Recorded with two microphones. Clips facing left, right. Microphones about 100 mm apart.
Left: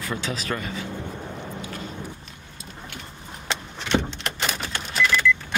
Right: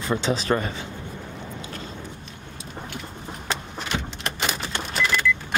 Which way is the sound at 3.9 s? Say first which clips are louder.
Left 8 dB; 30° left (ahead or behind).